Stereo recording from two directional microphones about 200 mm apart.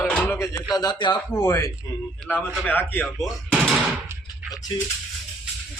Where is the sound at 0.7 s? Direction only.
20° left (ahead or behind); by 3.7 s centre (ahead or behind).